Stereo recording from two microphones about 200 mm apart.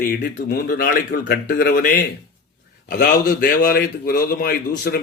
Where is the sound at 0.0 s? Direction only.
45° left (ahead or behind).